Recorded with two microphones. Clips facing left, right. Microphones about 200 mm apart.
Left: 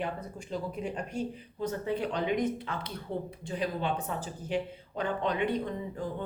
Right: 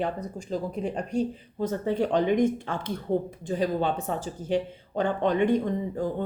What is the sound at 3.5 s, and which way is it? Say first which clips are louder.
Speech: right 6 dB; 40° right (ahead or behind).